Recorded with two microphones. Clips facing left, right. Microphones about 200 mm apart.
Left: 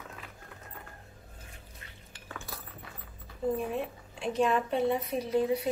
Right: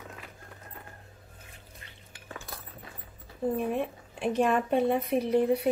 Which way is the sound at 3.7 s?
60° right (ahead or behind).